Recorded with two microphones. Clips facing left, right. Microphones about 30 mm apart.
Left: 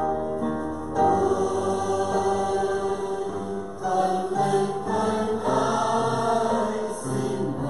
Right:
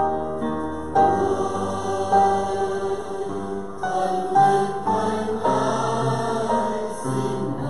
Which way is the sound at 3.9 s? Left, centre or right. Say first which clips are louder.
Right 4 dB; centre.